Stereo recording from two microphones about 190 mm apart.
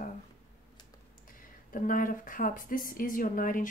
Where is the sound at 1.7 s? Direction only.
45° left (ahead or behind).